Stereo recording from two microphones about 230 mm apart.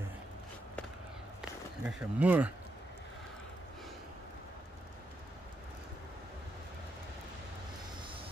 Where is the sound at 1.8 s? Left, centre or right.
Centre.